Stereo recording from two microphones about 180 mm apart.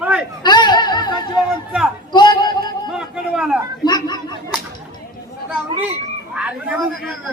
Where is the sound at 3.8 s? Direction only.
20° left (ahead or behind).